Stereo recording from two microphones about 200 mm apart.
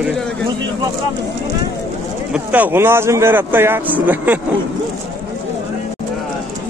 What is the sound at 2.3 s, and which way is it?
Speech, 10° right (ahead or behind).